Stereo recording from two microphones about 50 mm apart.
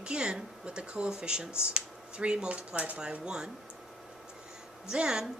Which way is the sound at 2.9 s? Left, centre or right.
Centre.